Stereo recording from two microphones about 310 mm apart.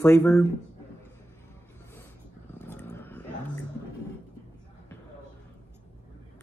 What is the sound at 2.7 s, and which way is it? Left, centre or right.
Vehicle, centre.